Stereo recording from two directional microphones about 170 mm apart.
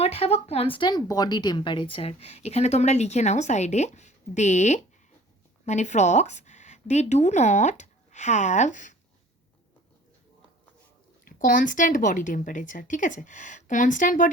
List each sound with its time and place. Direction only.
0.0 s a woman's voice: 35° left (ahead or behind)
11.3 s a woman's voice: 55° left (ahead or behind)